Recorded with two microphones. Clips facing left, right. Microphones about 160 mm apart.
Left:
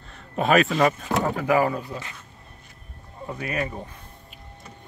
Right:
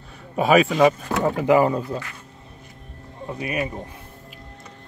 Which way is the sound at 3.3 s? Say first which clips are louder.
Right 2 dB; 20° right (ahead or behind).